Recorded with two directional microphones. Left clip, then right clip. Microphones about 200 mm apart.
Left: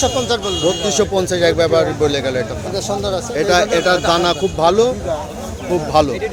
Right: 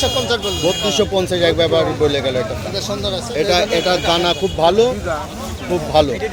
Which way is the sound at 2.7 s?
40° left (ahead or behind).